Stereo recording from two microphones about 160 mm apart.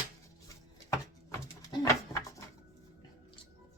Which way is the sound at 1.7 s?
20° left (ahead or behind).